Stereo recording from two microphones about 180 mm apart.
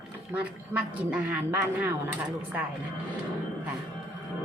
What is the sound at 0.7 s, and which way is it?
A woman's voice, 10° right (ahead or behind).